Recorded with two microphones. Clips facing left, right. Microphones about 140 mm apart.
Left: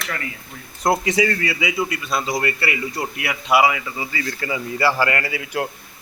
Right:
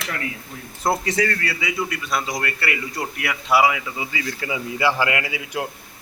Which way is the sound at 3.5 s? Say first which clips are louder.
Left 1 dB; 10° left (ahead or behind).